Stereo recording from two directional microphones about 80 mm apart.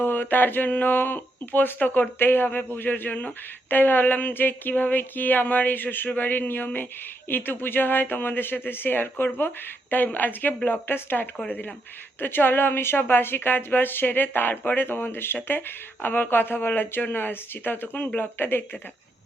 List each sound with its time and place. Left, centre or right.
0.0 s speech: left